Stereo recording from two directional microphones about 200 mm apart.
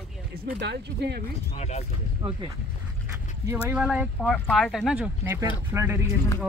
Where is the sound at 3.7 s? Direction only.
5° right (ahead or behind).